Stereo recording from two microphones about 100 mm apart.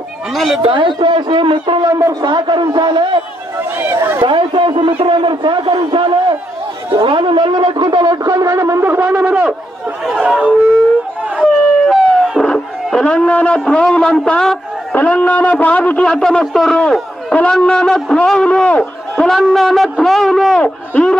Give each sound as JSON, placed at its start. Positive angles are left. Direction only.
{"t": 0.3, "sound": "speech", "side_deg": 0}
{"t": 0.6, "sound": "a man's voice", "side_deg": -60}
{"t": 1.9, "sound": "a man's voice", "side_deg": -30}
{"t": 2.2, "sound": "a man's voice", "side_deg": -50}
{"t": 3.5, "sound": "a sound", "side_deg": -20}
{"t": 4.2, "sound": "a man's voice", "side_deg": -55}
{"t": 11.4, "sound": "howl", "side_deg": 0}
{"t": 13.7, "sound": "a man's voice", "side_deg": 10}
{"t": 20.5, "sound": "a man's voice", "side_deg": 10}